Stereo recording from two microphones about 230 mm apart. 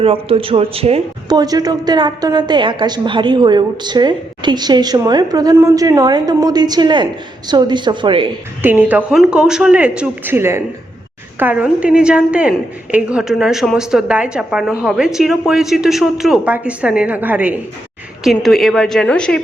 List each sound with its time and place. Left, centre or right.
0.0 s speech: right
8.6 s a woman's voice: centre